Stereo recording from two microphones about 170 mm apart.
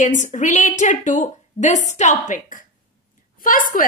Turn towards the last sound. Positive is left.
turn(degrees=55)  # may be behind; listen again after turning